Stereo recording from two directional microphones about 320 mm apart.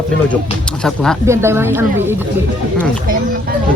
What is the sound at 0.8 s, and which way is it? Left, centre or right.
Speech, centre.